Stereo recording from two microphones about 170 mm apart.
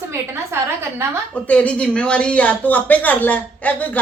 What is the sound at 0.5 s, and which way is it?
Speech, 15° right (ahead or behind).